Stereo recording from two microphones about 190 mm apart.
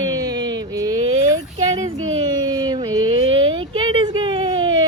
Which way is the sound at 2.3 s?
20° right (ahead or behind).